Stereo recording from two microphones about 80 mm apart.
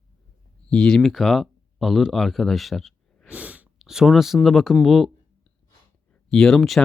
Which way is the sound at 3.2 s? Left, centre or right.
Centre.